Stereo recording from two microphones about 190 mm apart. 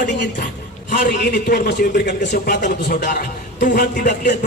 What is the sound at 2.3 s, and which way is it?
Speech, 45° left (ahead or behind).